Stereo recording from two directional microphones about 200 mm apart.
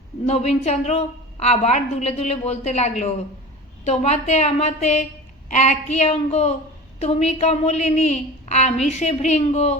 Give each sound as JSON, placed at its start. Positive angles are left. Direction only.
{"t": 0.3, "sound": "a woman's voice", "side_deg": 30}